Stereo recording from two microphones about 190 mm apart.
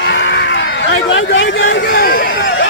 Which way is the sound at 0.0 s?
70° left (ahead or behind).